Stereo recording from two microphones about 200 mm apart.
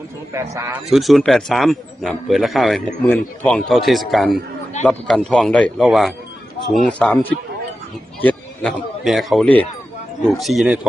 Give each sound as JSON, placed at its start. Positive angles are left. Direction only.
{"t": 0.3, "sound": "speech", "side_deg": -15}
{"t": 0.9, "sound": "a man's voice", "side_deg": 0}